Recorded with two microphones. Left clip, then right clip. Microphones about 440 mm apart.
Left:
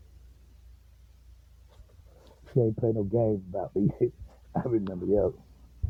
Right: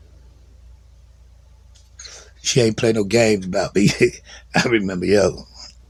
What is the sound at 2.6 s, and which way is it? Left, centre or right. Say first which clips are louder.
Speech: right 9 dB; left.